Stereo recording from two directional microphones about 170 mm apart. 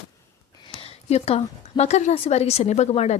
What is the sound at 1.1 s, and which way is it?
A woman's voice, 35° left (ahead or behind).